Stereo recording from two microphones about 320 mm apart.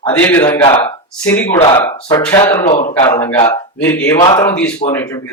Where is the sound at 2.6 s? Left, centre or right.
Left.